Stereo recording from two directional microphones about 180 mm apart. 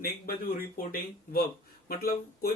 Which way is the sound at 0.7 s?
50° left (ahead or behind).